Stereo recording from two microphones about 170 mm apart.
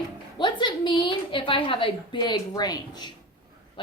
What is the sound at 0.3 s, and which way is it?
A woman's voice, 25° left (ahead or behind).